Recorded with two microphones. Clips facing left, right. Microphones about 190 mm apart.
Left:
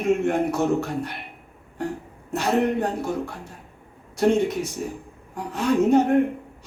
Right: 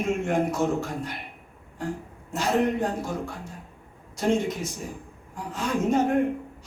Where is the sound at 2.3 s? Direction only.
65° left (ahead or behind).